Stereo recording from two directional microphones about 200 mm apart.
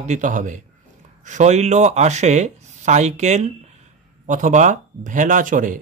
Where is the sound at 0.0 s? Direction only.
40° right (ahead or behind).